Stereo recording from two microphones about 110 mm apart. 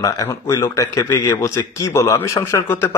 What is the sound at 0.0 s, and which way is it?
A man's voice, 35° left (ahead or behind).